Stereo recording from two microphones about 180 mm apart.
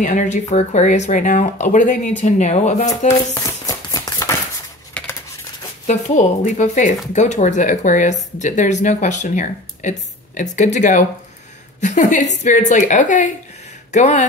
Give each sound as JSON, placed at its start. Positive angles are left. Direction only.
{"t": 0.0, "sound": "speech", "side_deg": 45}
{"t": 3.2, "sound": "a sound", "side_deg": 20}
{"t": 5.9, "sound": "speech", "side_deg": 40}